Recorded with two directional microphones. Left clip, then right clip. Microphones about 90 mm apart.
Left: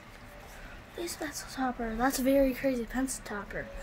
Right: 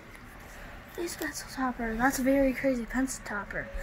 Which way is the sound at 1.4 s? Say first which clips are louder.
Even; 90° left.